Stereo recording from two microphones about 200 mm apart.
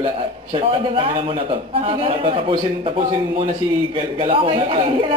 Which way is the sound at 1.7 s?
30° right (ahead or behind).